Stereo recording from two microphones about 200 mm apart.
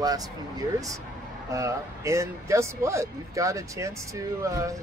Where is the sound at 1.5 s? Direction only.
15° right (ahead or behind).